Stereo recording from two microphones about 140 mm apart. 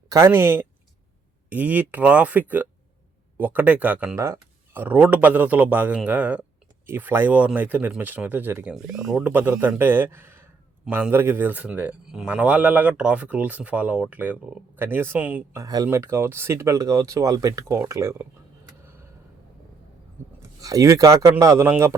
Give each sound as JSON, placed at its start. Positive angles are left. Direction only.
{"t": 0.1, "sound": "a man's voice", "side_deg": -15}
{"t": 8.7, "sound": "speech", "side_deg": 0}
{"t": 9.3, "sound": "a man's voice", "side_deg": -10}
{"t": 15.5, "sound": "speech", "side_deg": -25}
{"t": 20.6, "sound": "speech", "side_deg": -25}